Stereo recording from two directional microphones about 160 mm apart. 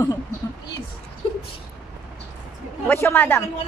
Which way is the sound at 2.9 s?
15° left (ahead or behind).